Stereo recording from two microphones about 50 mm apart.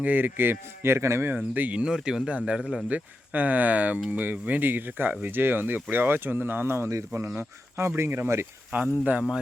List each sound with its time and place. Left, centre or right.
0.0 s speech: right
1.7 s speech: centre
2.9 s speech: right
6.9 s speech: right
8.7 s speech: right